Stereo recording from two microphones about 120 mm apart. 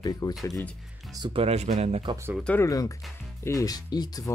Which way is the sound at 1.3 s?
55° right (ahead or behind).